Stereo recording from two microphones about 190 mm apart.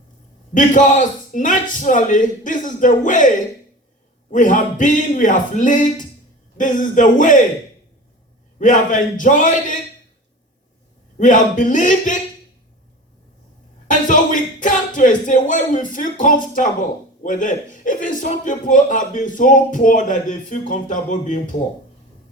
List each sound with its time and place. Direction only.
0.5 s a man's voice: 40° left (ahead or behind)
8.5 s a man's voice: 45° left (ahead or behind)
11.2 s a man's voice: 45° left (ahead or behind)
14.1 s a man's voice: 45° left (ahead or behind)